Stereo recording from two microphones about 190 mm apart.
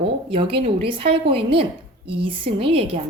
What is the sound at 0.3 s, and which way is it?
A woman's voice, 30° right (ahead or behind).